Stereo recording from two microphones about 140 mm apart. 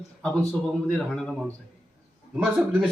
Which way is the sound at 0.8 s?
5° left (ahead or behind).